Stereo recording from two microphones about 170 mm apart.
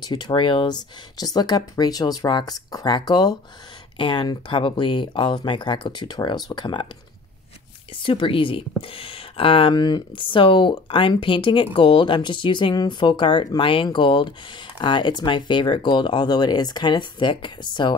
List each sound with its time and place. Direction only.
0.0 s speech: 25° left (ahead or behind)
8.0 s speech: 30° left (ahead or behind)